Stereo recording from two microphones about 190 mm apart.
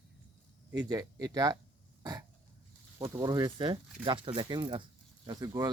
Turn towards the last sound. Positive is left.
turn(degrees=-20)  # may be behind; listen again after turning